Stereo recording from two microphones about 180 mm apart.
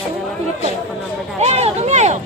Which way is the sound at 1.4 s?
35° right (ahead or behind).